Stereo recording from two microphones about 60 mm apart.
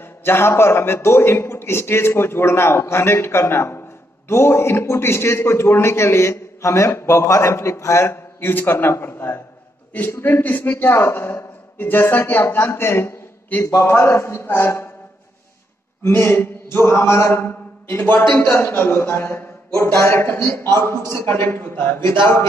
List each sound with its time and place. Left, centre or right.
0.0 s a man's voice: left
10.4 s speech: left
10.9 s a man's voice: left
13.5 s a man's voice: left
13.8 s a man's voice: left
16.0 s mantra: left
18.6 s a man's voice: left